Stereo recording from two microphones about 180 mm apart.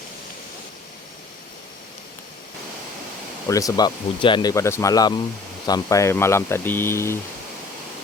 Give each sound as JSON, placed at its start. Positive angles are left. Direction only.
{"t": 3.5, "sound": "speech", "side_deg": 20}